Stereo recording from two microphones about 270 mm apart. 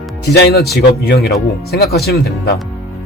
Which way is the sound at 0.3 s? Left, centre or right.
Left.